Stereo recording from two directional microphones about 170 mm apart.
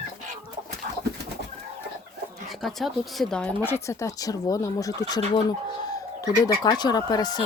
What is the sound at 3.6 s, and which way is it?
Speech, 15° left (ahead or behind).